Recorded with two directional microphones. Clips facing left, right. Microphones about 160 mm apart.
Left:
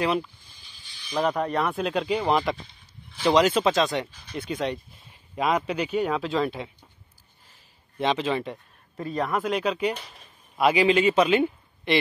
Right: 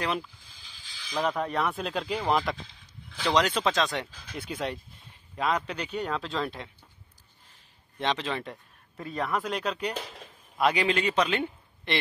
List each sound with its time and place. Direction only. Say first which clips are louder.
1.2 s speech: left 3 dB; centre (ahead or behind)
5.3 s speech: left 4 dB; 10° left (ahead or behind)
8.0 s speech: left 5 dB; 5° left (ahead or behind)